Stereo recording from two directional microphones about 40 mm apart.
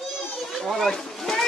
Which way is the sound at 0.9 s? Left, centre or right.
Centre.